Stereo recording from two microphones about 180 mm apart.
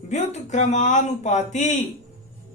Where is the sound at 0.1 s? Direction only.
40° left (ahead or behind).